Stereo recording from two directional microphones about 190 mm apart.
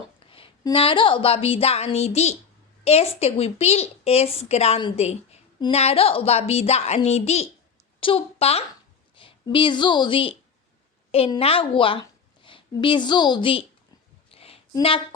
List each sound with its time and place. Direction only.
0.3 s a woman's voice: 30° left (ahead or behind)
14.3 s a sound: 30° left (ahead or behind)
14.8 s speech: 30° left (ahead or behind)